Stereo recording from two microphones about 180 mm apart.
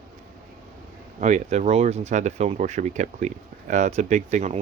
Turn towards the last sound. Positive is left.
turn(degrees=-40)  # may be behind; listen again after turning